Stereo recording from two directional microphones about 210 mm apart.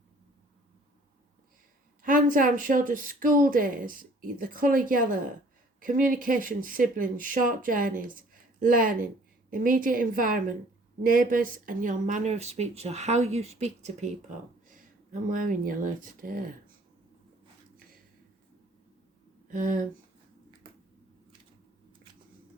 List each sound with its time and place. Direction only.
2.0 s speech: 40° right (ahead or behind)
15.1 s speech: 40° right (ahead or behind)
19.5 s speech: 40° right (ahead or behind)